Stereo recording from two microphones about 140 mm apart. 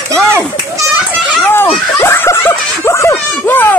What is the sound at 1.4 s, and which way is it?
Children playing, 15° left (ahead or behind).